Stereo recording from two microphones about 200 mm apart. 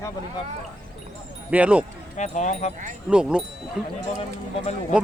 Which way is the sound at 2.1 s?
35° left (ahead or behind).